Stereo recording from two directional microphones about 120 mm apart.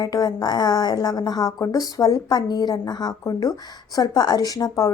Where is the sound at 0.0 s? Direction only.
35° left (ahead or behind).